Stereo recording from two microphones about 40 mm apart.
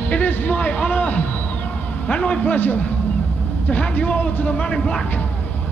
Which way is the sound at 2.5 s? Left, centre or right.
Left.